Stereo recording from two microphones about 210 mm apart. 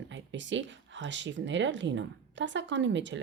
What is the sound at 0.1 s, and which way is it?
Speech, 60° right (ahead or behind).